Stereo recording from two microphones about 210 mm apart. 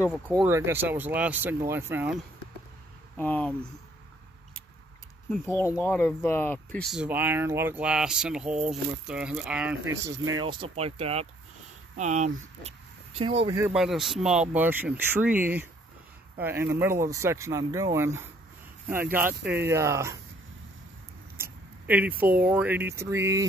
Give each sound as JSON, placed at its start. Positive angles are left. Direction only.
{"t": 0.4, "sound": "speech", "side_deg": -10}
{"t": 3.2, "sound": "speech", "side_deg": 5}
{"t": 5.3, "sound": "speech", "side_deg": 10}
{"t": 13.7, "sound": "speech", "side_deg": 0}
{"t": 21.4, "sound": "speech", "side_deg": -10}